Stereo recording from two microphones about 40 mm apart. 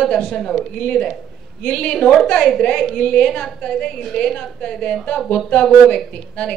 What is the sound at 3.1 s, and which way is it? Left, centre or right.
A woman's voice, left.